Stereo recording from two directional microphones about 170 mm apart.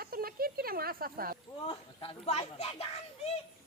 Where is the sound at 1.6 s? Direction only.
30° left (ahead or behind).